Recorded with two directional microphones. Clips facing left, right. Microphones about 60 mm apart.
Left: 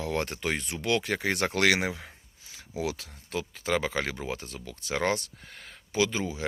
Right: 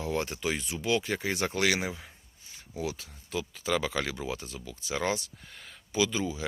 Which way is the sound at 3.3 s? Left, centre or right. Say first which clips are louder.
Left 1 dB; left.